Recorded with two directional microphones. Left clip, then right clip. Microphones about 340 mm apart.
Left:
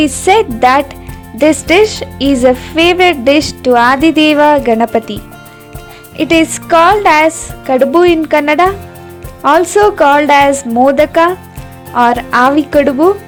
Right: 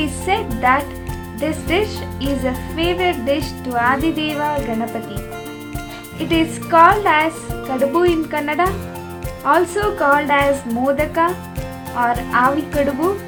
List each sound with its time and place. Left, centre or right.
0.0 s speech: left
6.1 s speech: left